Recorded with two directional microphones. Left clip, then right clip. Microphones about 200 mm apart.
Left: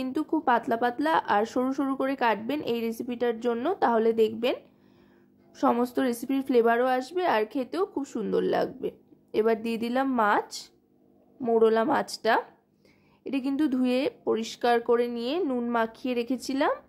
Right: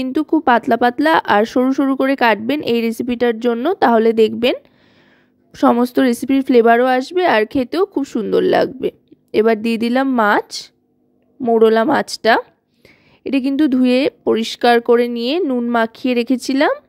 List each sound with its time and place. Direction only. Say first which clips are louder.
0.0 s speech: right 11 dB; 35° right (ahead or behind)